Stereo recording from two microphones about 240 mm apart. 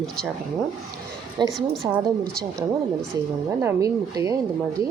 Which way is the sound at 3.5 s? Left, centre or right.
Centre.